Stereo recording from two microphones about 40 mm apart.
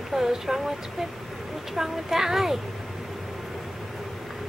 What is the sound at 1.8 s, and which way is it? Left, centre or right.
Speech, centre.